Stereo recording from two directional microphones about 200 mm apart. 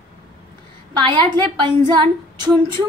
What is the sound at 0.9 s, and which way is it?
A woman's voice, 20° right (ahead or behind).